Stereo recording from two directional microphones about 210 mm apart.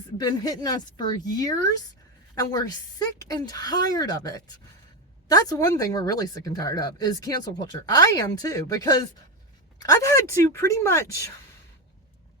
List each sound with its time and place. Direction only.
0.2 s a woman's voice: 20° left (ahead or behind)